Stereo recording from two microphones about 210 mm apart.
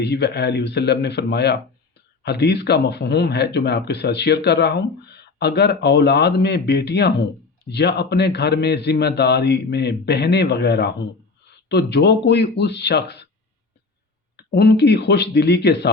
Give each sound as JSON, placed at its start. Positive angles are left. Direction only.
{"t": 0.0, "sound": "a man's voice", "side_deg": 50}
{"t": 14.3, "sound": "a man's voice", "side_deg": 50}